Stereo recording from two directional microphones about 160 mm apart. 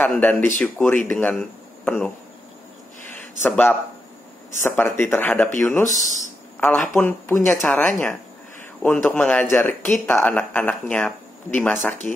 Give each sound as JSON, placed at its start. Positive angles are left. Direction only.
{"t": 0.0, "sound": "speech", "side_deg": 10}
{"t": 3.4, "sound": "speech", "side_deg": 10}
{"t": 5.9, "sound": "speech", "side_deg": 50}
{"t": 6.9, "sound": "speech", "side_deg": 15}